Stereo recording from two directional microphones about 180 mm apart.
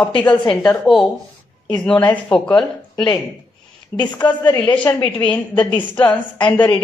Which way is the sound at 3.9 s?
10° left (ahead or behind).